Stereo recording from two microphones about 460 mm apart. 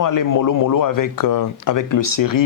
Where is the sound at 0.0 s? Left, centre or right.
Left.